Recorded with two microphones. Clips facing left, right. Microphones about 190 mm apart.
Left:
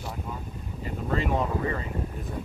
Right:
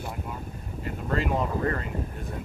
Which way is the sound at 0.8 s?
Centre (ahead or behind).